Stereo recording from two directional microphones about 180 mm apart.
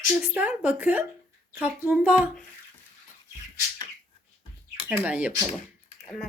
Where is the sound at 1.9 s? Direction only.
5° right (ahead or behind).